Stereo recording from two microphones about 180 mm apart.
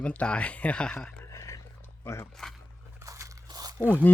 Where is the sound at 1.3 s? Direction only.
20° left (ahead or behind).